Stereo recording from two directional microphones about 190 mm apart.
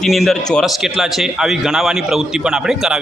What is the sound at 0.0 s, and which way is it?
A man's voice, centre (ahead or behind).